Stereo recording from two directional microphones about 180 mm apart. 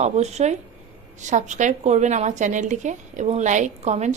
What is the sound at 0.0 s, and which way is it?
A woman's voice, 40° right (ahead or behind).